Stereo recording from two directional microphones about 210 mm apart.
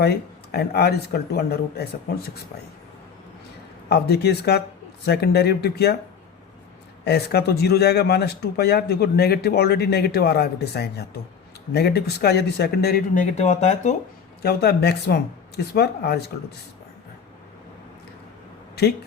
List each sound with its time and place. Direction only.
0.0 s speech: 50° left (ahead or behind)
3.8 s speech: 50° left (ahead or behind)
7.0 s speech: 50° left (ahead or behind)
13.3 s speech: 35° left (ahead or behind)
14.4 s speech: 50° left (ahead or behind)